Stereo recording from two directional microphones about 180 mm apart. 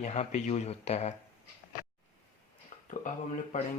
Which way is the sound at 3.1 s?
45° left (ahead or behind).